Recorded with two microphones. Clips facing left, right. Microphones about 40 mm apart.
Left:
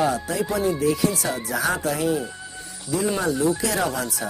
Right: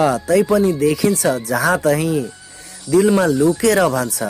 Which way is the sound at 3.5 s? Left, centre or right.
Right.